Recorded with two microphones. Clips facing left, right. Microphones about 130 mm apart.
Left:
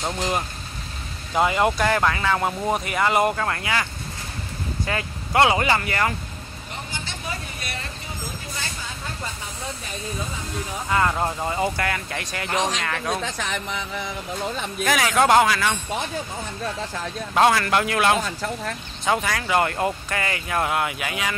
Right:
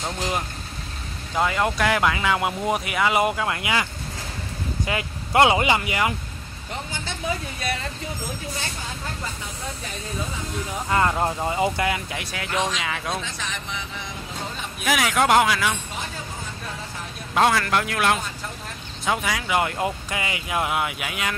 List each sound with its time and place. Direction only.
1.3 s speech: 10° left (ahead or behind)
1.9 s speech: 10° right (ahead or behind)
4.8 s speech: 20° right (ahead or behind)
10.9 s speech: 15° right (ahead or behind)
12.1 s speech: 5° right (ahead or behind)
13.2 s music: 60° left (ahead or behind)
14.8 s speech: centre (ahead or behind)
17.3 s speech: centre (ahead or behind)